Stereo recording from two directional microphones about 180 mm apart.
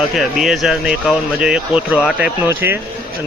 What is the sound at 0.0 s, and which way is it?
A man's voice, centre (ahead or behind).